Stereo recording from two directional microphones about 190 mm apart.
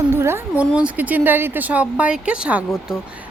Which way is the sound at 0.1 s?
15° right (ahead or behind).